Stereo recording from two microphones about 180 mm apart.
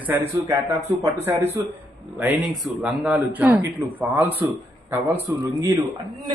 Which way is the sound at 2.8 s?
10° right (ahead or behind).